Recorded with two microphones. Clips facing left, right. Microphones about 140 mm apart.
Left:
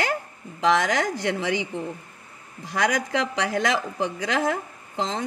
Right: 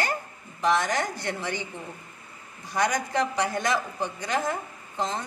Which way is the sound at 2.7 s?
90° left.